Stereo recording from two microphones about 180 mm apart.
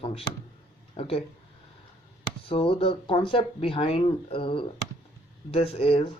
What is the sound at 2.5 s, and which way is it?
Speech, 30° left (ahead or behind).